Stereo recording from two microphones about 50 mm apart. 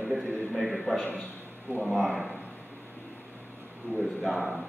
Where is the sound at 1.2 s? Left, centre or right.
Left.